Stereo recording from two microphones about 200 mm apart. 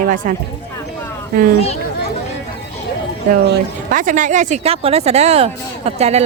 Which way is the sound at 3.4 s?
45° right (ahead or behind).